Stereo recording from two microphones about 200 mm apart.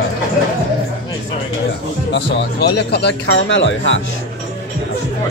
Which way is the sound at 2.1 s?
60° left (ahead or behind).